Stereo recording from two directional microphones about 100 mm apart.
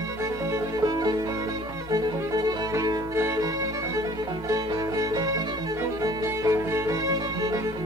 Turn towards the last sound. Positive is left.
turn(degrees=-35)  # may be behind; listen again after turning